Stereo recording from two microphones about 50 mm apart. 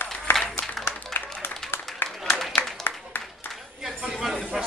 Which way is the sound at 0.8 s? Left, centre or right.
Left.